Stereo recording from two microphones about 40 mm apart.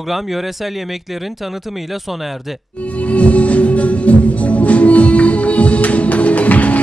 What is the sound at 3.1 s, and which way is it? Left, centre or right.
Music, left.